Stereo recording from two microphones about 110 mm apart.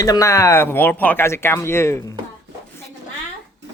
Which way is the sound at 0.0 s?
30° left (ahead or behind).